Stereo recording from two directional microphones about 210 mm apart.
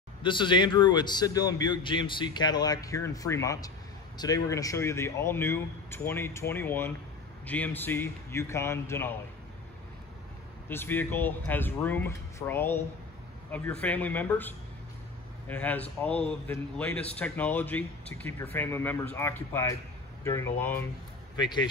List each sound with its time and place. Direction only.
0.2 s a man's voice: 20° left (ahead or behind)
10.7 s speech: 10° left (ahead or behind)
21.4 s a man's voice: 20° left (ahead or behind)